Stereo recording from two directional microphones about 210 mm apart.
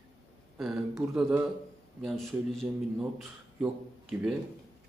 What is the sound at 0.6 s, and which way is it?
A man's voice, centre (ahead or behind).